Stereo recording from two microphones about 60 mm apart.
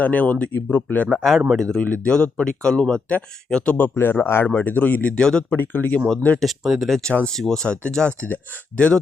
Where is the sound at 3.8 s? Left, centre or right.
Left.